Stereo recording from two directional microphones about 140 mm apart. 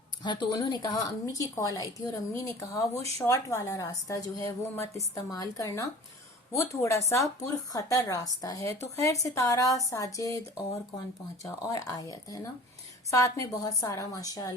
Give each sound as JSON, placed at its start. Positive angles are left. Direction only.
{"t": 0.2, "sound": "speech", "side_deg": 35}
{"t": 11.4, "sound": "speech", "side_deg": 25}